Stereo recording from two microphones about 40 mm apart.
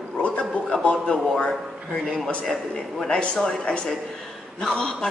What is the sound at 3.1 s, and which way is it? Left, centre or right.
Speech, left.